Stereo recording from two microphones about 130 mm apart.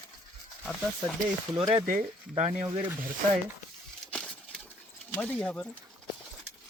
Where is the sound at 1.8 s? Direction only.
90° right.